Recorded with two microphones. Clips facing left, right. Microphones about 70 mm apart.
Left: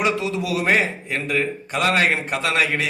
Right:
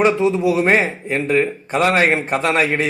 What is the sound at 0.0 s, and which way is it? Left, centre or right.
A man's voice, right.